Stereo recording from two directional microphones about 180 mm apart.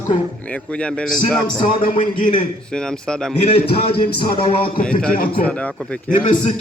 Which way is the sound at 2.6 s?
5° left (ahead or behind).